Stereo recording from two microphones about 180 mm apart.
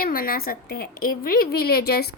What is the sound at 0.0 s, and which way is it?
A woman's voice, 55° left (ahead or behind).